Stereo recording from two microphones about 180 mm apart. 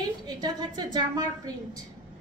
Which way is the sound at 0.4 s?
25° right (ahead or behind).